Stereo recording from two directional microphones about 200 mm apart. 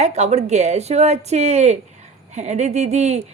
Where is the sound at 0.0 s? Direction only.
35° right (ahead or behind).